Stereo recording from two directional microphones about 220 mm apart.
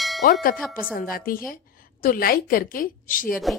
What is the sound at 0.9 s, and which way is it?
A woman's voice, 40° left (ahead or behind).